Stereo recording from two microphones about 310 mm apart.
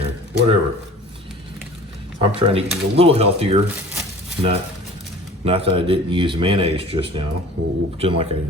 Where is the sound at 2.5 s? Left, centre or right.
Centre.